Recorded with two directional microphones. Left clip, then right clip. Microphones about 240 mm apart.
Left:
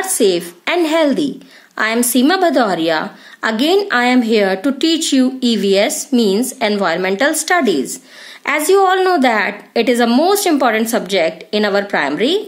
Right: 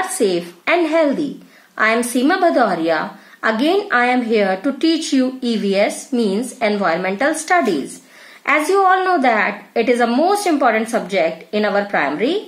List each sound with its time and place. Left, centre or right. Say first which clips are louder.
0.2 s a woman's voice: left 6 dB; left